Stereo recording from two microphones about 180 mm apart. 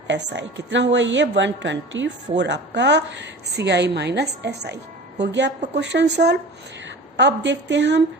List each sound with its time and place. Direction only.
0.1 s a woman's voice: 75° right (ahead or behind)